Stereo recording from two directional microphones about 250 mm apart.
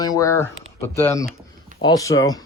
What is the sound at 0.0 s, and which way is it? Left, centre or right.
Speech, centre.